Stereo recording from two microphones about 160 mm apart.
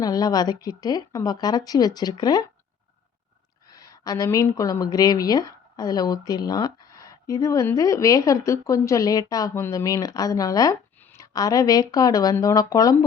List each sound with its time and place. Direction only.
0.0 s a woman's voice: 25° left (ahead or behind)
3.7 s a woman's voice: 20° left (ahead or behind)